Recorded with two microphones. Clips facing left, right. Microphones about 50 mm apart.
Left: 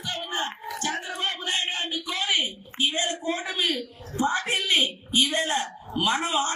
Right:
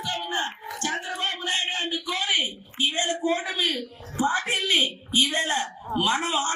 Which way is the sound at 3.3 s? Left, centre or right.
Right.